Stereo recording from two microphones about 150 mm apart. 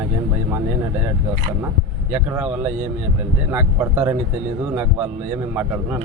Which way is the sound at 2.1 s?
10° right (ahead or behind).